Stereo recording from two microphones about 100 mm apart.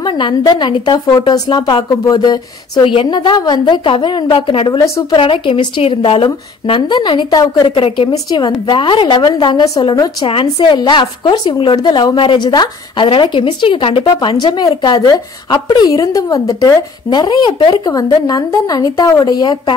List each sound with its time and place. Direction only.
0.0 s a woman's voice: 50° left (ahead or behind)
2.8 s a woman's voice: 65° left (ahead or behind)
3.1 s a woman's voice: 50° left (ahead or behind)
4.7 s speech: 30° left (ahead or behind)
5.1 s a woman's voice: 60° left (ahead or behind); by 6.2 s 75° left (ahead or behind)
6.2 s a woman's voice: 50° left (ahead or behind)
7.6 s a woman's voice: 65° left (ahead or behind)
8.1 s a woman's voice: 45° left (ahead or behind)
10.2 s a woman's voice: 55° left (ahead or behind)
14.0 s a woman's voice: 45° left (ahead or behind)
17.1 s a woman's voice: 45° left (ahead or behind)
17.8 s a woman's voice: 40° left (ahead or behind)